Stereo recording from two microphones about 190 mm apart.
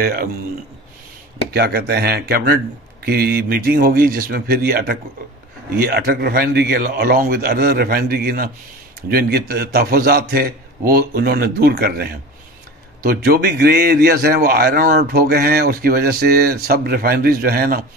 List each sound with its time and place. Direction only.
0.0 s a man's voice: 50° right (ahead or behind)
1.5 s a man's voice: 55° right (ahead or behind)